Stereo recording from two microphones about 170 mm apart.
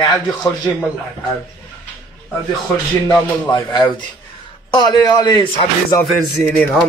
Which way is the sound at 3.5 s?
25° left (ahead or behind).